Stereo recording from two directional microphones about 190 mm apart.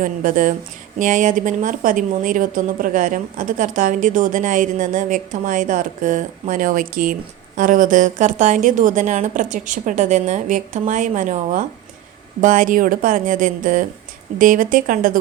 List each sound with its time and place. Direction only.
0.0 s a woman's voice: 45° right (ahead or behind)